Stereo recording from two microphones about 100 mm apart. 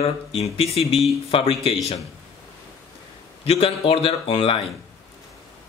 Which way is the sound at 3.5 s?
70° left (ahead or behind).